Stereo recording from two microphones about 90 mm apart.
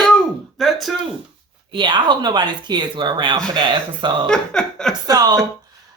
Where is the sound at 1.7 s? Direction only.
60° right (ahead or behind).